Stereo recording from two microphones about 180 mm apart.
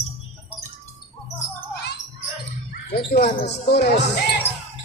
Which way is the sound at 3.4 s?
65° left (ahead or behind).